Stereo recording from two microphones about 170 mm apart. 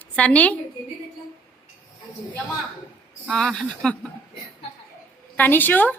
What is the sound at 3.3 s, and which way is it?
Speech, centre (ahead or behind).